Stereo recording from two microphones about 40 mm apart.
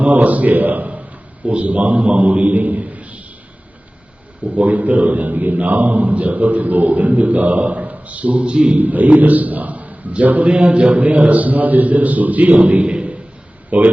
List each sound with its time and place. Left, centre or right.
0.0 s a man's voice: right
4.4 s a man's voice: right
8.8 s a man's voice: right
12.8 s a sound: right
13.7 s speech: right